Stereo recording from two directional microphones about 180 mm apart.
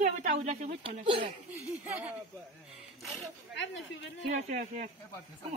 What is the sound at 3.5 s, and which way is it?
Speech, 90° left.